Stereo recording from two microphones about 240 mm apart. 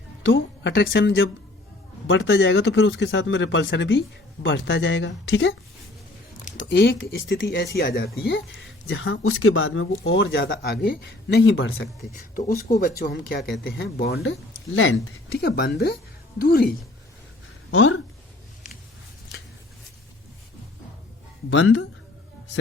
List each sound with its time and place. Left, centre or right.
0.2 s speech: left
6.7 s speech: left
8.9 s speech: left
15.3 s speech: left
17.7 s speech: left
21.5 s speech: left